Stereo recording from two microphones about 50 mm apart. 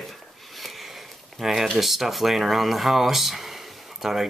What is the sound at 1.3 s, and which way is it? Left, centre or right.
Speech, centre.